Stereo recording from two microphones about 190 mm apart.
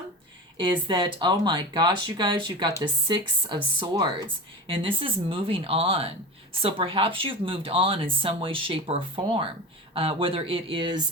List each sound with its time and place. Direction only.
0.9 s speech: 25° right (ahead or behind)